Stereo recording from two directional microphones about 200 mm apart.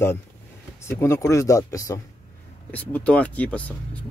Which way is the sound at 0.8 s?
15° left (ahead or behind).